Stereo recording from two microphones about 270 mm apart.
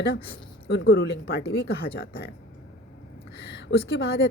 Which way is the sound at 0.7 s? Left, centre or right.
Left.